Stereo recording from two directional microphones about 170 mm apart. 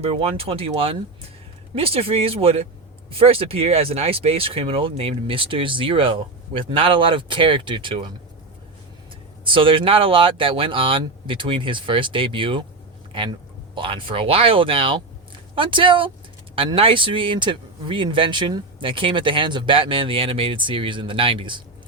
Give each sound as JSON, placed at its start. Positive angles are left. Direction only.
{"t": 0.0, "sound": "speech", "side_deg": -35}
{"t": 9.4, "sound": "speech", "side_deg": -30}
{"t": 13.7, "sound": "speech", "side_deg": -30}